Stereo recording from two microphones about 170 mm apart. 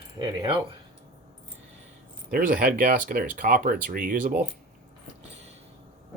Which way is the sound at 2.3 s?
55° right (ahead or behind).